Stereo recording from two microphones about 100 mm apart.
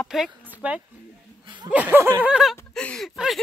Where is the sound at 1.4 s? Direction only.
50° right (ahead or behind).